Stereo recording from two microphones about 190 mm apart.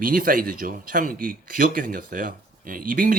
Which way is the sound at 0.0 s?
50° right (ahead or behind).